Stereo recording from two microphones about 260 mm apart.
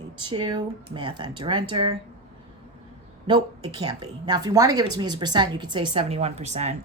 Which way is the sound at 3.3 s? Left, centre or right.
Centre.